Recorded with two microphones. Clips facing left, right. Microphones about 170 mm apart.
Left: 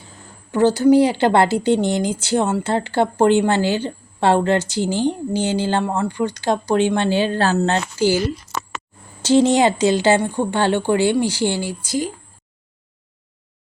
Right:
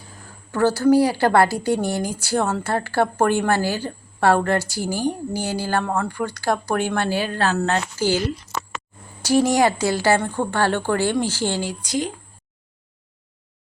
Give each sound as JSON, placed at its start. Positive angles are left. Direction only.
{"t": 0.5, "sound": "speech", "side_deg": 20}
{"t": 9.2, "sound": "a woman's voice", "side_deg": 25}